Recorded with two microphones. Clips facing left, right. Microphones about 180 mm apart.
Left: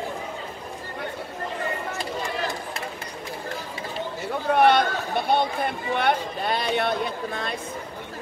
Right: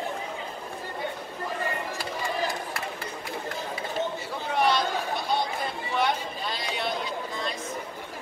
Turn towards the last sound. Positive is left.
turn(degrees=60)  # may be behind; listen again after turning